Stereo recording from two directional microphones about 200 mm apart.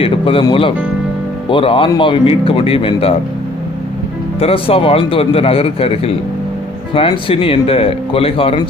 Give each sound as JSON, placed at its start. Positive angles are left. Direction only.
{"t": 0.0, "sound": "speech", "side_deg": 25}
{"t": 4.4, "sound": "speech", "side_deg": 30}